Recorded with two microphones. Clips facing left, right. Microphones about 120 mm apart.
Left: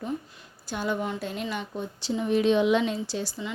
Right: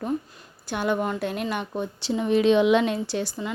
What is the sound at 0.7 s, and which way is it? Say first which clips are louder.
A woman's voice: right 4 dB; 65° right (ahead or behind).